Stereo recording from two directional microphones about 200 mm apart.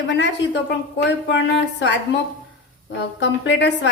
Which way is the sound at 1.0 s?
60° left (ahead or behind).